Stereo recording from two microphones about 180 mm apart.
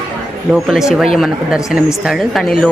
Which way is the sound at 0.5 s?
Centre (ahead or behind).